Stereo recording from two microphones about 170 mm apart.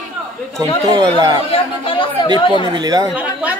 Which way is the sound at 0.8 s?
25° right (ahead or behind).